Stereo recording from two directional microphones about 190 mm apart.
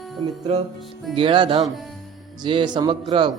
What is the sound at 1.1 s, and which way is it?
Speech, 25° right (ahead or behind).